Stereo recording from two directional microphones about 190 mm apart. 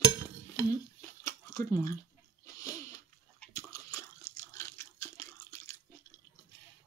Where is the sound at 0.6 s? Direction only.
15° left (ahead or behind).